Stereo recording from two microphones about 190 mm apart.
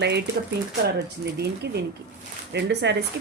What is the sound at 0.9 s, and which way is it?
Speech, 60° right (ahead or behind).